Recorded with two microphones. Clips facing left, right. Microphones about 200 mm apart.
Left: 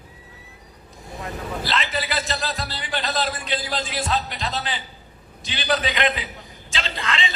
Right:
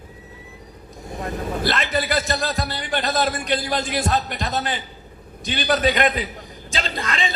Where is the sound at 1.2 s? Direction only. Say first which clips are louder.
Right 5 dB; 55° right (ahead or behind).